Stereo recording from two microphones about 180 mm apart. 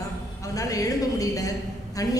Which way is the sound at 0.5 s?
20° left (ahead or behind).